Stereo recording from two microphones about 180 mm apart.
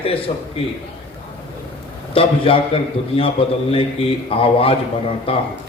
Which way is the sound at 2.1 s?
30° left (ahead or behind).